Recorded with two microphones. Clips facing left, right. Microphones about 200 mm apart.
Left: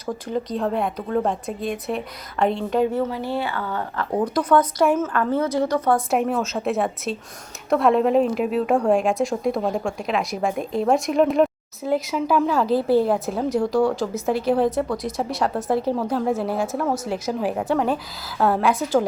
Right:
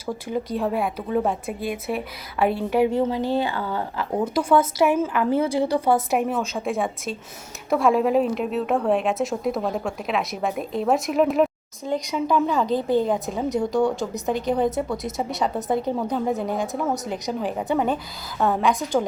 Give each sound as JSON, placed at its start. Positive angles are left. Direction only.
{"t": 0.1, "sound": "a woman's voice", "side_deg": -10}
{"t": 6.1, "sound": "a woman's voice", "side_deg": 0}